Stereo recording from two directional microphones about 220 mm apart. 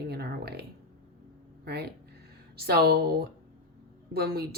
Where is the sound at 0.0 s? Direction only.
45° right (ahead or behind).